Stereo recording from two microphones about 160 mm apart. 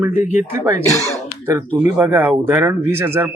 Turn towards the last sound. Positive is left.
turn(degrees=-15)  # may be behind; listen again after turning